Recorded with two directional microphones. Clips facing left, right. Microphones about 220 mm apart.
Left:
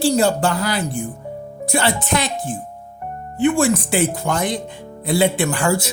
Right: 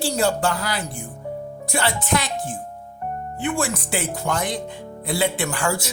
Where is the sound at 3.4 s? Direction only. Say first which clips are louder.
Left 9 dB; 25° left (ahead or behind).